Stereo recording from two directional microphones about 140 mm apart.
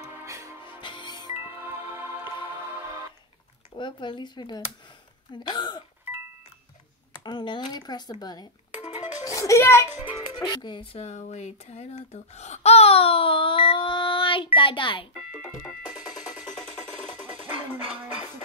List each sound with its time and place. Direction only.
0.2 s music: 20° right (ahead or behind)
0.7 s music: 35° left (ahead or behind)
1.3 s music: 15° right (ahead or behind)
3.7 s speech: 35° left (ahead or behind)
6.1 s music: 15° right (ahead or behind)
7.2 s a child's voice: 35° left (ahead or behind)
10.0 s speech: 30° left (ahead or behind)